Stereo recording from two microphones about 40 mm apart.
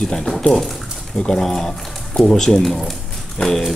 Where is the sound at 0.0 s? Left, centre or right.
Centre.